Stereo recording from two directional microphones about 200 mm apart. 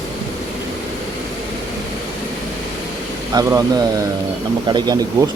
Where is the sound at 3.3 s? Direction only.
20° right (ahead or behind).